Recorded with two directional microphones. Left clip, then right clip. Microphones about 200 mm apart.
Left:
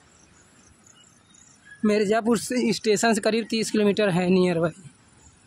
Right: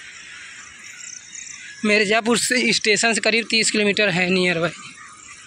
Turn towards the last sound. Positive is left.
turn(degrees=25)  # may be behind; listen again after turning